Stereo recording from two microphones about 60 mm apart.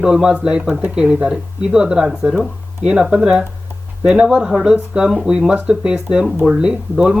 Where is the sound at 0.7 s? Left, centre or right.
Right.